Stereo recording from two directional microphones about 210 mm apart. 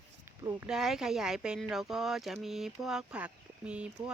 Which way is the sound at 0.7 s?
Centre (ahead or behind).